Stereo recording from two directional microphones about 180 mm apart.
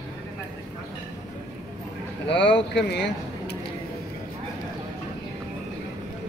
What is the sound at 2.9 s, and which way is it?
Speech, 70° left (ahead or behind).